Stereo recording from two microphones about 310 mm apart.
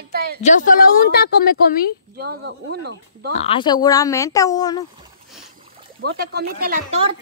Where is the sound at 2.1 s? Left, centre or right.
Right.